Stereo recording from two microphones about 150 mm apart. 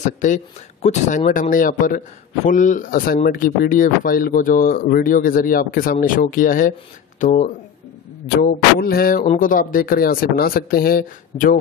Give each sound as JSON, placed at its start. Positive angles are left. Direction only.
{"t": 0.0, "sound": "speech", "side_deg": 55}
{"t": 8.4, "sound": "speech", "side_deg": 80}
{"t": 9.4, "sound": "speech", "side_deg": 65}